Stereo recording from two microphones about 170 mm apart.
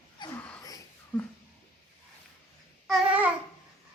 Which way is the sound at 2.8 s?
5° right (ahead or behind).